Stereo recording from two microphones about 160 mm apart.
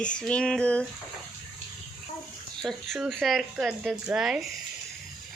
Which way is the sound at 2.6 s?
Centre (ahead or behind).